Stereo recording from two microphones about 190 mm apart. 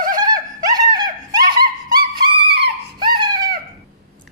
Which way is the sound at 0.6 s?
20° right (ahead or behind).